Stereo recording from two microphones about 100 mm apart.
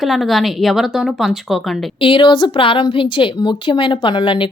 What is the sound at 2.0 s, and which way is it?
A woman's voice, 60° left (ahead or behind).